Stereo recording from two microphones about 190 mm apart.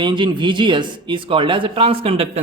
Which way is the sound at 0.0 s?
25° right (ahead or behind).